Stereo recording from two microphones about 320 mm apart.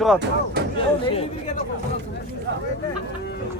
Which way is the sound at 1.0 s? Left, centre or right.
Centre.